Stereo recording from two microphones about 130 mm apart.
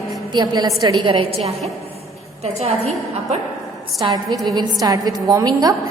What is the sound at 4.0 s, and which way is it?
A woman's voice, 25° right (ahead or behind).